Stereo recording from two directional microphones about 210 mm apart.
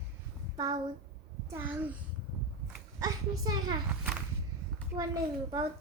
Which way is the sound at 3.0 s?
20° right (ahead or behind).